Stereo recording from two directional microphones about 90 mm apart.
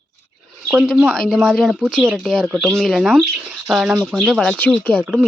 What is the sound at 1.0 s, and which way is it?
Speech, 5° left (ahead or behind).